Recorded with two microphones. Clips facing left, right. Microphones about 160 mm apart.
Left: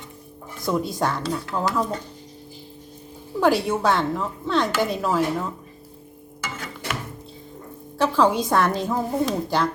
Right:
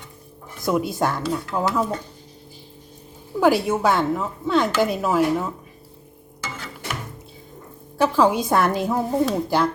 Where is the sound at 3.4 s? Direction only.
5° right (ahead or behind).